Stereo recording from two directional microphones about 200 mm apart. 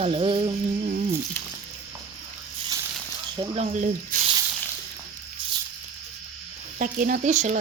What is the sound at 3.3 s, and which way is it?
Music, 20° right (ahead or behind).